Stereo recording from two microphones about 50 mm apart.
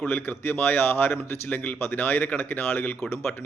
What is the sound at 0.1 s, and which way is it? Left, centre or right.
Speech, left.